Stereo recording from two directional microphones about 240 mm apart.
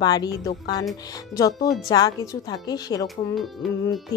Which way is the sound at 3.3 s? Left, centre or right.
Centre.